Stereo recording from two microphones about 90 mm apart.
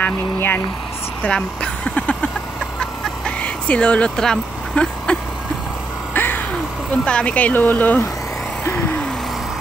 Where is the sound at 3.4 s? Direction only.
15° left (ahead or behind).